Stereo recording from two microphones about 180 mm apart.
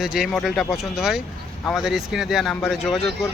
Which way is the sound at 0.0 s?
5° right (ahead or behind).